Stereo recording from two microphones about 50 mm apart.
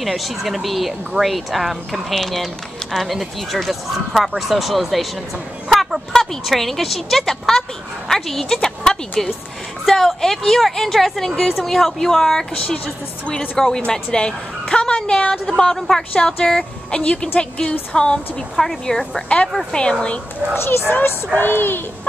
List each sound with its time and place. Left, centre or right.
0.0 s a woman's voice: centre
16.9 s a woman's voice: left
19.2 s speech: left
20.5 s speech: left
21.4 s a child's voice: left